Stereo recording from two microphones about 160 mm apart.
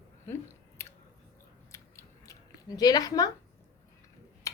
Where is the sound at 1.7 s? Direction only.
15° left (ahead or behind).